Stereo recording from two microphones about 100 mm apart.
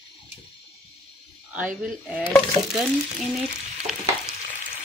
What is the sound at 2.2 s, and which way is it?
Speech, 5° left (ahead or behind).